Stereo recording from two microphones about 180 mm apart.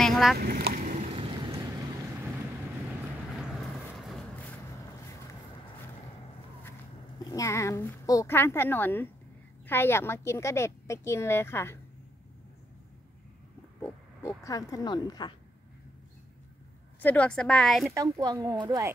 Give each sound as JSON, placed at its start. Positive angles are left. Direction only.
{"t": 0.0, "sound": "boat", "side_deg": 0}
{"t": 0.4, "sound": "boat", "side_deg": -60}
{"t": 1.1, "sound": "vehicle", "side_deg": -30}
{"t": 3.3, "sound": "vehicle", "side_deg": 0}
{"t": 7.2, "sound": "a woman's voice", "side_deg": 20}
{"t": 13.7, "sound": "speech", "side_deg": 15}
{"t": 17.0, "sound": "a woman's voice", "side_deg": 10}
{"t": 17.9, "sound": "speech", "side_deg": -20}